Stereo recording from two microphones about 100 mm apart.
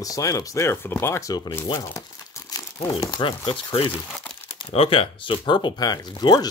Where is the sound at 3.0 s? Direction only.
50° left (ahead or behind).